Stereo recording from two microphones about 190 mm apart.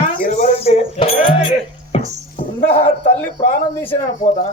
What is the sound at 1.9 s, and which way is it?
Music, 30° left (ahead or behind).